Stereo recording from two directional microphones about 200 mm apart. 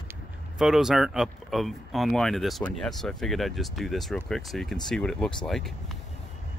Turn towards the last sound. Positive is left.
turn(degrees=5)  # may be behind; listen again after turning